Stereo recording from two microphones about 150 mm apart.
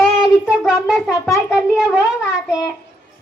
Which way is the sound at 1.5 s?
5° right (ahead or behind).